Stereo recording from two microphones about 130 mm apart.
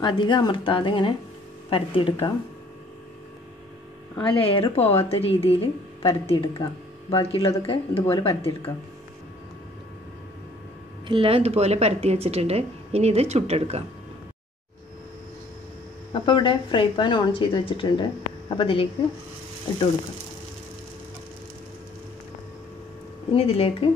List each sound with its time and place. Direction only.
0.0 s speech: 35° left (ahead or behind)
4.2 s speech: 45° left (ahead or behind)
6.6 s a sound: 40° left (ahead or behind)
7.3 s speech: 45° left (ahead or behind)
11.1 s speech: 45° right (ahead or behind)
16.1 s speech: 40° left (ahead or behind)
23.3 s speech: 50° left (ahead or behind)